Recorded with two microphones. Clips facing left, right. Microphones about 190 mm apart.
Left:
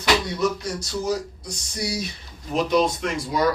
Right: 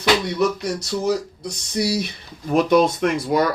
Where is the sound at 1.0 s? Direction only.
65° right (ahead or behind).